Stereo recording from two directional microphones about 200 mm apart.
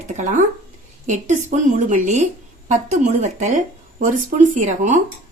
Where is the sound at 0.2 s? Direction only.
40° right (ahead or behind).